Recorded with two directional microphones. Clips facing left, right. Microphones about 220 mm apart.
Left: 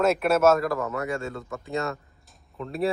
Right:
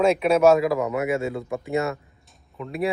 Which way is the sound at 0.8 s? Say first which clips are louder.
Right 5 dB; 15° right (ahead or behind).